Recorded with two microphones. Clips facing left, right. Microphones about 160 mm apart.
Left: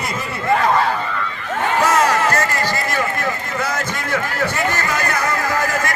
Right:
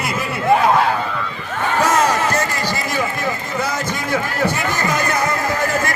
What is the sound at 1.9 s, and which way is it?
Run, 20° right (ahead or behind).